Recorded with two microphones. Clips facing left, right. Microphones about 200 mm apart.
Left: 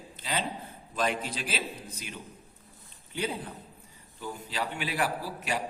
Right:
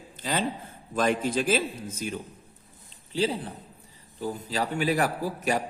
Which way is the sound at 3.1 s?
35° right (ahead or behind).